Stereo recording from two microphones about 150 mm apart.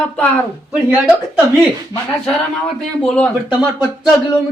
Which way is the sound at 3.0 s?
5° left (ahead or behind).